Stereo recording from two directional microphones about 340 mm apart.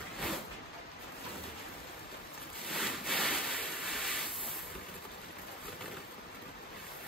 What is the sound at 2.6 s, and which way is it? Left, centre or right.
Rub, centre.